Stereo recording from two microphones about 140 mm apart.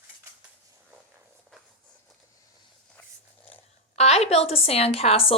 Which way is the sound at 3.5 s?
50° left (ahead or behind).